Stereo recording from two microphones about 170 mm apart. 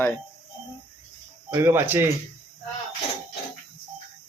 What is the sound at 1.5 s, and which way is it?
Speech, 15° right (ahead or behind).